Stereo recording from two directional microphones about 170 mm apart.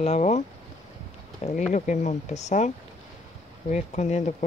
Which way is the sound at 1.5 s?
45° left (ahead or behind).